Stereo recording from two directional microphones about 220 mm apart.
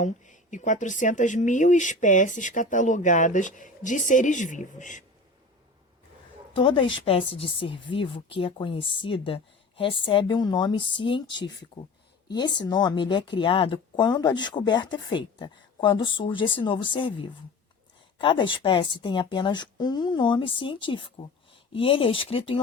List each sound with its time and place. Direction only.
0.0 s speech: 35° left (ahead or behind)
6.5 s a woman's voice: 25° left (ahead or behind)
12.6 s speech: 20° left (ahead or behind)